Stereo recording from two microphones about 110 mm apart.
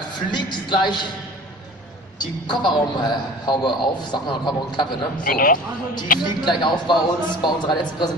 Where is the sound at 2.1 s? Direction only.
45° left (ahead or behind).